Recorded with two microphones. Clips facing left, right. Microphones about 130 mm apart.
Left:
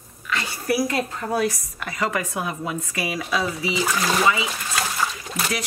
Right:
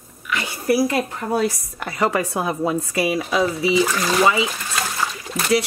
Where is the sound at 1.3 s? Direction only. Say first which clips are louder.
Right 2 dB; 25° right (ahead or behind).